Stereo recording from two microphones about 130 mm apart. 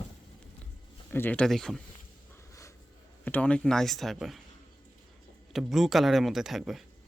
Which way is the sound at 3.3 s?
10° left (ahead or behind).